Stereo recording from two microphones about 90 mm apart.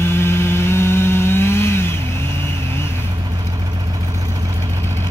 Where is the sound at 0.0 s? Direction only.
25° left (ahead or behind).